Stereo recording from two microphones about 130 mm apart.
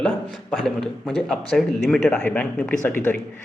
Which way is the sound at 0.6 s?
5° left (ahead or behind).